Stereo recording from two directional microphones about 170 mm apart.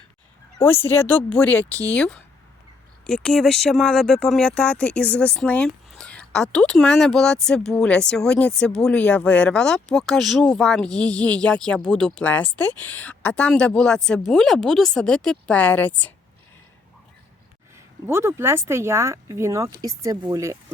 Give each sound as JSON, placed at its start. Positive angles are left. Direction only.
{"t": 0.9, "sound": "a woman's voice", "side_deg": 10}
{"t": 18.0, "sound": "speech", "side_deg": -15}